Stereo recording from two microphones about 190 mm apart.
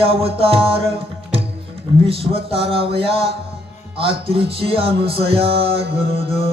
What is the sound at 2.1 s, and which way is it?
Music, 30° right (ahead or behind).